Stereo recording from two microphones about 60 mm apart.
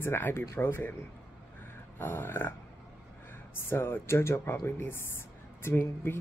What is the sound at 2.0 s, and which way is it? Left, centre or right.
Speech, left.